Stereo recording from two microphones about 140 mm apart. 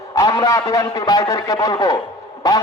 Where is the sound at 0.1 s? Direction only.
25° left (ahead or behind).